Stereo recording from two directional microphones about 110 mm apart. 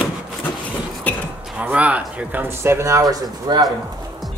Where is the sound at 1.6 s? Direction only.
10° right (ahead or behind); by 3.6 s 35° right (ahead or behind).